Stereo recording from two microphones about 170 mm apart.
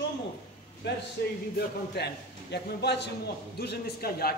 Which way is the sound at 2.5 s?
80° left.